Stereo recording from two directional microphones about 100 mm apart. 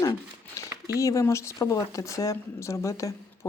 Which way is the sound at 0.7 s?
30° right (ahead or behind).